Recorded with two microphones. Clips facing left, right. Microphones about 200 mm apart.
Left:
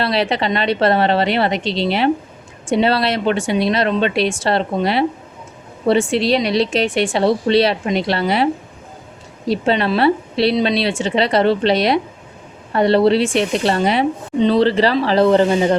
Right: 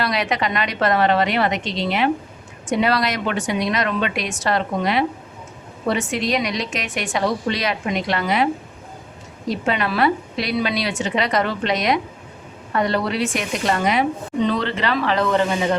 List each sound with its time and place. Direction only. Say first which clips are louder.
0.0 s a woman's voice: left 4 dB; 30° left (ahead or behind)
9.5 s a woman's voice: left 5 dB; 30° left (ahead or behind)